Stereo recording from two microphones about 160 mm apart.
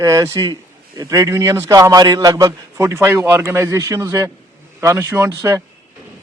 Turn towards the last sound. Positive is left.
turn(degrees=-20)  # may be behind; listen again after turning